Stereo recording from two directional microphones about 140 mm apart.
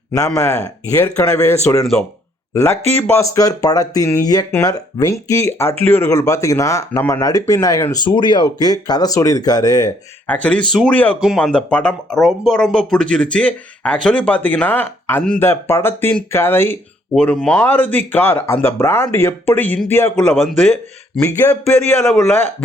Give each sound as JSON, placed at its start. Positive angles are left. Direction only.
{"t": 0.3, "sound": "speech", "side_deg": 20}
{"t": 1.8, "sound": "speech", "side_deg": 5}
{"t": 2.5, "sound": "speech", "side_deg": 20}
{"t": 10.2, "sound": "speech", "side_deg": 10}
{"t": 21.4, "sound": "speech", "side_deg": 25}